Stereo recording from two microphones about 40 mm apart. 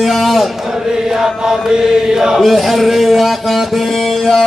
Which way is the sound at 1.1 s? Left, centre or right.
Centre.